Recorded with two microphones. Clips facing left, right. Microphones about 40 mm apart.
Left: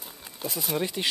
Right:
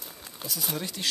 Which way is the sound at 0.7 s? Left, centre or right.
Left.